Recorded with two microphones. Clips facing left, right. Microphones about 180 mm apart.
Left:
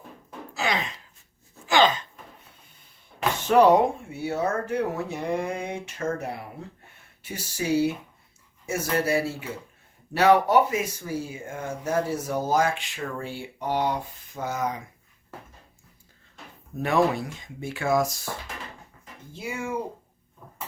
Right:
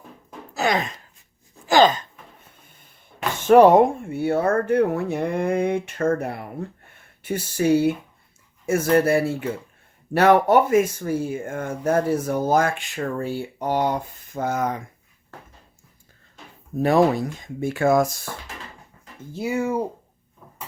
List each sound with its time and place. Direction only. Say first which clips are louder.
0.5 s speech: right 5 dB; 45° right (ahead or behind)
1.6 s gasp: right 5 dB; 40° right (ahead or behind)
3.4 s speech: right 5 dB; 50° right (ahead or behind)
16.7 s speech: right 5 dB; 35° right (ahead or behind); by 18.1 s 50° right (ahead or behind)
19.4 s speech: right 7 dB; 40° right (ahead or behind)